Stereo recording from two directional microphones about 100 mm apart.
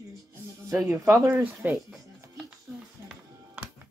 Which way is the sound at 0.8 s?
30° right (ahead or behind).